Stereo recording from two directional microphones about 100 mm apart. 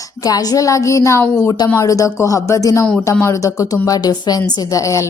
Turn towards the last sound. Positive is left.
turn(degrees=30)  # may be behind; listen again after turning